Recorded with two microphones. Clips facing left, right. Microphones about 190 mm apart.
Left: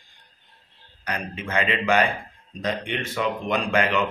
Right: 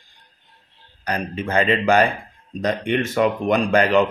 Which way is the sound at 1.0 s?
35° right (ahead or behind).